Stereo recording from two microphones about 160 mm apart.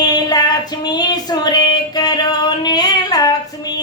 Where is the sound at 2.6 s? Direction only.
25° left (ahead or behind).